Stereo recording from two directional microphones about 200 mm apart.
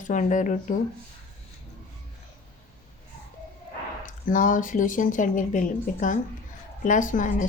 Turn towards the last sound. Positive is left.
turn(degrees=40)  # may be behind; listen again after turning